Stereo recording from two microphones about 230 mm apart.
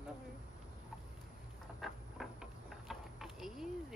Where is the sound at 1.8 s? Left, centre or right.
Centre.